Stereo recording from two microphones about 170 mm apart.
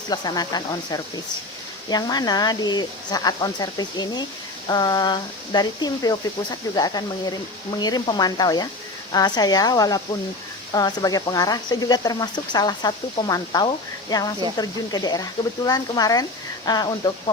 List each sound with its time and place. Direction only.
0.1 s speech: 25° left (ahead or behind)